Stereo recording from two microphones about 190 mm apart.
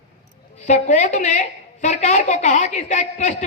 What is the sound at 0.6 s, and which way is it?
Speech, 40° left (ahead or behind).